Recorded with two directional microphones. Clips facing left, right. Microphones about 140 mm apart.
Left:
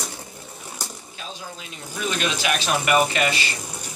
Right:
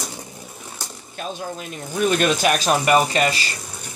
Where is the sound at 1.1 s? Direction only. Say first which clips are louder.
Right 12 dB; 50° right (ahead or behind); by 3.4 s 35° right (ahead or behind).